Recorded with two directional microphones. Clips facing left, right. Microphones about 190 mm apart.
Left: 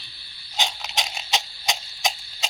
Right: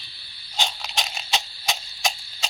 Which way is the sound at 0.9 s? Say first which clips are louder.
Left 1 dB; 15° left (ahead or behind).